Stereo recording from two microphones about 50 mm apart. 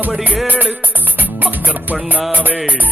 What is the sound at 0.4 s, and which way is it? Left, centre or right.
Music, right.